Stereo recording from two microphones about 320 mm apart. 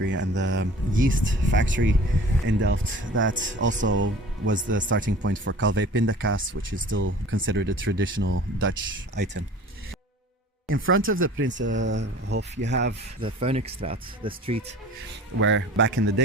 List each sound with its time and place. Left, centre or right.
0.0 s speech: right
10.7 s speech: right
13.2 s speech: centre
15.4 s speech: right